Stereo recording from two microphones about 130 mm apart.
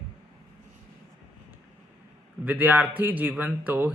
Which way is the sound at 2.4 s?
15° right (ahead or behind).